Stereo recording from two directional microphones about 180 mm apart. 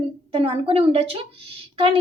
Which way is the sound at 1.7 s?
30° right (ahead or behind).